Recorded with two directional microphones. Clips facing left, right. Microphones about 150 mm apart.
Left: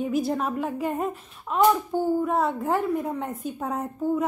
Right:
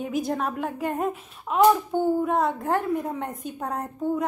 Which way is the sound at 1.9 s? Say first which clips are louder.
Right 1 dB; 20° right (ahead or behind).